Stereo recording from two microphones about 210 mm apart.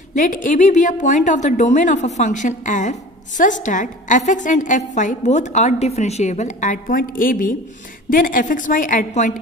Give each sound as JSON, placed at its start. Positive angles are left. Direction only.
{"t": 0.2, "sound": "a woman's voice", "side_deg": 40}